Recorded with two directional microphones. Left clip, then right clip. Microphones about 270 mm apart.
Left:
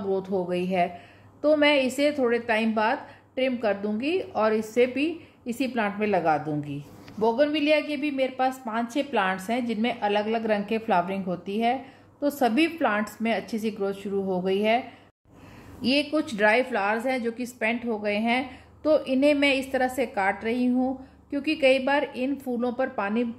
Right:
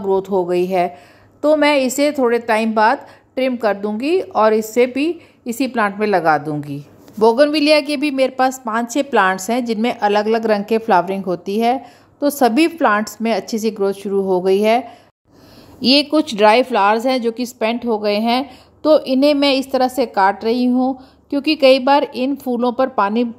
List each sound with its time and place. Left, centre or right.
0.1 s a woman's voice: centre
7.2 s a woman's voice: right
15.8 s a woman's voice: right